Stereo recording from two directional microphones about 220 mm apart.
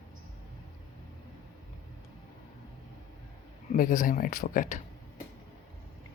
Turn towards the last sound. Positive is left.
turn(degrees=35)  # may be behind; listen again after turning